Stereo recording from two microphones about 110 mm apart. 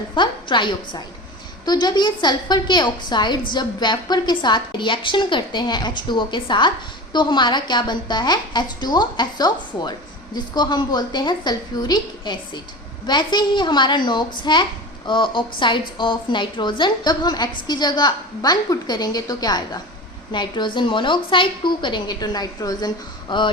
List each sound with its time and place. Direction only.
0.1 s a woman's voice: 45° left (ahead or behind)